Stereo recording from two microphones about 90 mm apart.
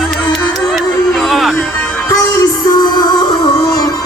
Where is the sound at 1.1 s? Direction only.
Centre (ahead or behind).